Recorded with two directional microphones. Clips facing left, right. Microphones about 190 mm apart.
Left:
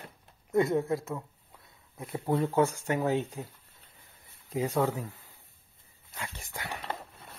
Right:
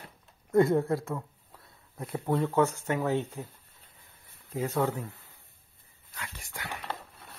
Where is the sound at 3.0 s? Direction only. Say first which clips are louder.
Left 1 dB; 15° left (ahead or behind).